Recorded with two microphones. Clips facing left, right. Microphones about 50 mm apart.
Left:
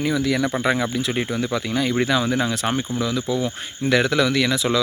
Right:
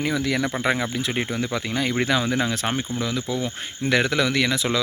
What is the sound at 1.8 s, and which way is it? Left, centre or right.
Speech, right.